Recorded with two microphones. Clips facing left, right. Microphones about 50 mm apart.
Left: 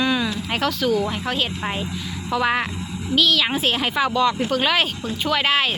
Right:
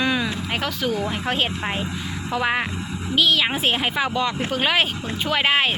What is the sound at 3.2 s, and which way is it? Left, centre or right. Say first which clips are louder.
Speech: even; right.